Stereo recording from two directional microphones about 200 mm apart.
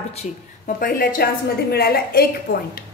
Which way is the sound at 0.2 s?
40° left (ahead or behind).